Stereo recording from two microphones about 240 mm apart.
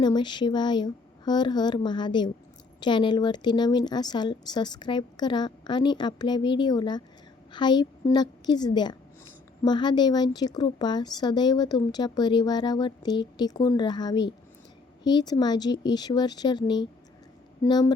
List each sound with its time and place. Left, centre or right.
0.0 s a woman's voice: centre